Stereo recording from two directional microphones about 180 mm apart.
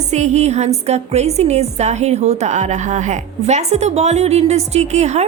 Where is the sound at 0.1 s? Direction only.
40° right (ahead or behind).